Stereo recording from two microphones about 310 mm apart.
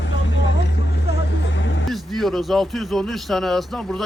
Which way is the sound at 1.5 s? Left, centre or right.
Left.